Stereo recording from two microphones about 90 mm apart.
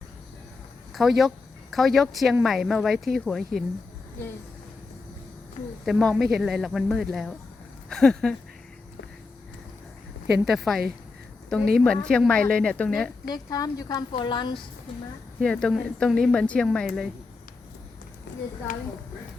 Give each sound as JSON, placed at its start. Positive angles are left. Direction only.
{"t": 0.9, "sound": "speech", "side_deg": 0}
{"t": 6.0, "sound": "speech", "side_deg": 0}
{"t": 10.4, "sound": "a woman's voice", "side_deg": 0}
{"t": 13.3, "sound": "speech", "side_deg": 45}
{"t": 14.1, "sound": "a woman's voice", "side_deg": 65}
{"t": 15.4, "sound": "a woman's voice", "side_deg": 10}